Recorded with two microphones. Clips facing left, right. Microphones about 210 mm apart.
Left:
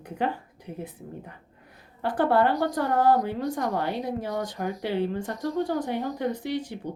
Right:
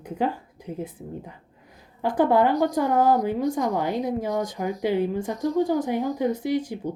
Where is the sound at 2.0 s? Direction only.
10° right (ahead or behind).